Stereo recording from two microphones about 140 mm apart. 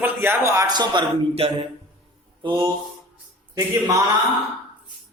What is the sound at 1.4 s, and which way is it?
Speech, 45° right (ahead or behind).